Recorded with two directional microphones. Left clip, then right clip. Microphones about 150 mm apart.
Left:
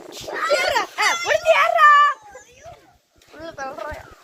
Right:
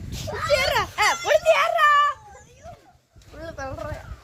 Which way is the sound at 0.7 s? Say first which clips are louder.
Left 1 dB; 85° right.